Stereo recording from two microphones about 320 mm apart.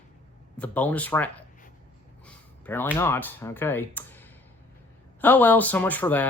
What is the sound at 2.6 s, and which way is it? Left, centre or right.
Speech, centre.